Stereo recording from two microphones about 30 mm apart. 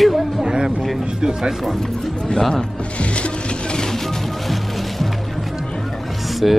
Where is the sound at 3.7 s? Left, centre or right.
Left.